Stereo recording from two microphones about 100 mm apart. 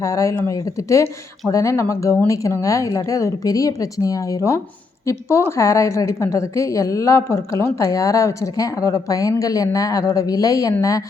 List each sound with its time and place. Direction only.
0.0 s a woman's voice: 30° left (ahead or behind)